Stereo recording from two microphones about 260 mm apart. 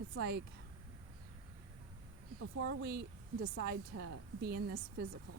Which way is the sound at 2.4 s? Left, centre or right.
Right.